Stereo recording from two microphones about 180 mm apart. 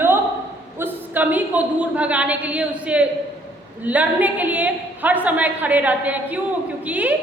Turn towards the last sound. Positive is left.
turn(degrees=-10)  # may be behind; listen again after turning